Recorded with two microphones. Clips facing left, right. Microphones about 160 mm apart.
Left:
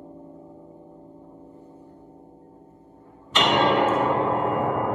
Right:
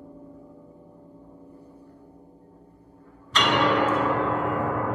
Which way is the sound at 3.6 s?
30° left (ahead or behind).